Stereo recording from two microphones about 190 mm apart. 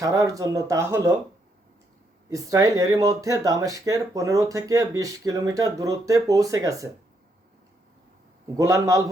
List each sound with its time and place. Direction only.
0.0 s speech: 15° right (ahead or behind)
2.3 s speech: 20° right (ahead or behind)
8.5 s speech: 15° right (ahead or behind)